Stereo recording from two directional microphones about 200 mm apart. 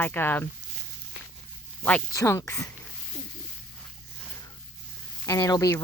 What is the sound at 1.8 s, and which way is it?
Speech, 10° left (ahead or behind).